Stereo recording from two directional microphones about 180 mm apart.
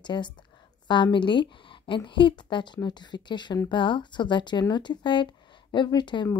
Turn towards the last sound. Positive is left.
turn(degrees=25)  # may be behind; listen again after turning